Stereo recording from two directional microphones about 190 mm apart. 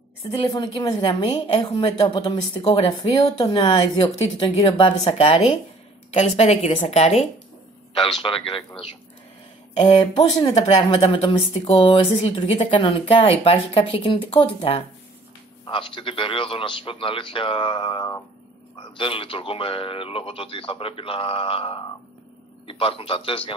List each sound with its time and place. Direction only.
0.4 s a woman's voice: 25° left (ahead or behind)